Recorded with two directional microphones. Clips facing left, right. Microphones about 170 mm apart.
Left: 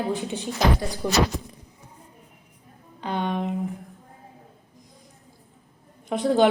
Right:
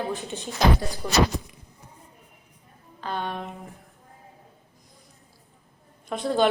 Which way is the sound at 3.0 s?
20° left (ahead or behind).